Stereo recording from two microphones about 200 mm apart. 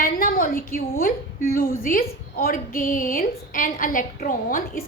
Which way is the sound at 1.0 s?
45° left (ahead or behind).